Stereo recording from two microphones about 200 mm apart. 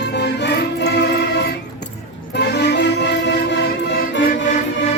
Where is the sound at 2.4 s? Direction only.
55° left (ahead or behind).